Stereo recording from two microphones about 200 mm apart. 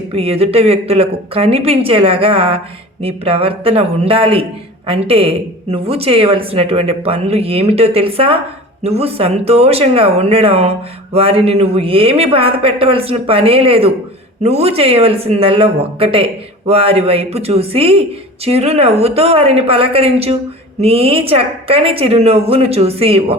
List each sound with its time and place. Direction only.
0.1 s speech: 30° right (ahead or behind)